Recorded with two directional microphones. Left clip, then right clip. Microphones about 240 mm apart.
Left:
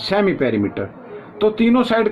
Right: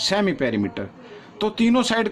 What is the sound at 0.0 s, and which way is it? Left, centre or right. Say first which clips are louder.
Speech: left 4 dB; right.